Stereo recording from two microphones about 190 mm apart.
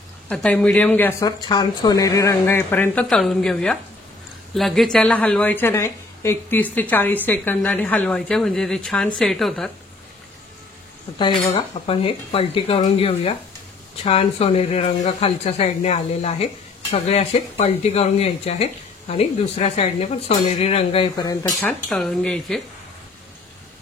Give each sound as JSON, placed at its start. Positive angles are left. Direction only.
{"t": 0.3, "sound": "a woman's voice", "side_deg": 5}
{"t": 1.4, "sound": "a woman's voice", "side_deg": 25}
{"t": 11.5, "sound": "speech", "side_deg": 30}
{"t": 21.8, "sound": "speech", "side_deg": 5}